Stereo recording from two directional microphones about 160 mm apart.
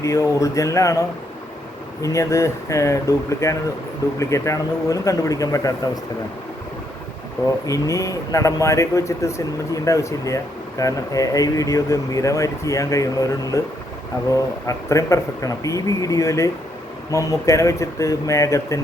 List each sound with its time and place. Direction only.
0.0 s speech: 20° left (ahead or behind)
2.0 s speech: 20° left (ahead or behind)
7.7 s speech: 20° left (ahead or behind)
14.7 s speech: 20° left (ahead or behind)